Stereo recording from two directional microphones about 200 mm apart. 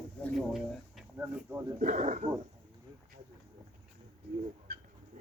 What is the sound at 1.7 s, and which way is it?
Speech, 35° right (ahead or behind).